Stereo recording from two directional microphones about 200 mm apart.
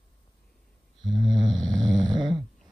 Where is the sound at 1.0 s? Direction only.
Centre (ahead or behind).